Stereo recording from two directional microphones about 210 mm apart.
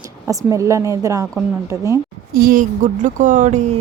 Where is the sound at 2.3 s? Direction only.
45° right (ahead or behind).